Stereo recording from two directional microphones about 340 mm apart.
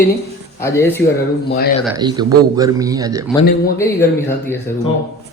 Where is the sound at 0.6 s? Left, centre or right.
Centre.